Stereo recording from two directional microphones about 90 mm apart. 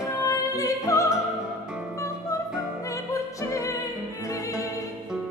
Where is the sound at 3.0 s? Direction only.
35° left (ahead or behind).